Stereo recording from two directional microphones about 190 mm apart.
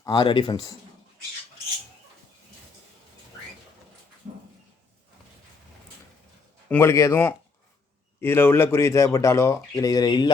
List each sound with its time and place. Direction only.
0.0 s speech: 25° left (ahead or behind)
6.7 s speech: 15° left (ahead or behind)